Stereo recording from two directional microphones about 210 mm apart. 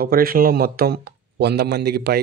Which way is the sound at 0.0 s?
45° right (ahead or behind).